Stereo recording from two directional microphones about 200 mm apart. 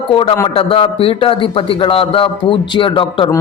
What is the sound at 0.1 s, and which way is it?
A man's voice, 25° left (ahead or behind).